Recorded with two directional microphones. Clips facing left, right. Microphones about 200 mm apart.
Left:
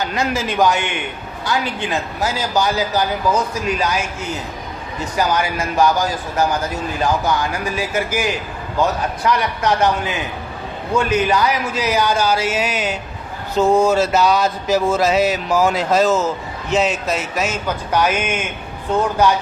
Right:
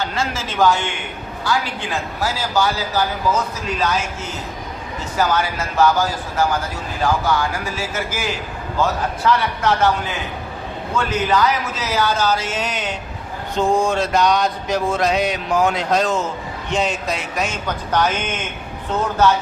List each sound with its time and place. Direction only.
0.0 s a man's voice: 15° left (ahead or behind)
2.2 s a man's voice: 15° left (ahead or behind)
5.1 s a man's voice: 15° left (ahead or behind)
10.9 s a man's voice: 10° left (ahead or behind)
13.6 s a sound: 5° left (ahead or behind)
17.9 s a man's voice: 10° left (ahead or behind)